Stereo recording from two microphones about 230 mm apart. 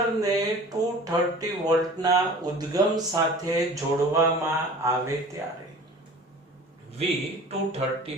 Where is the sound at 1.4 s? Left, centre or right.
Centre.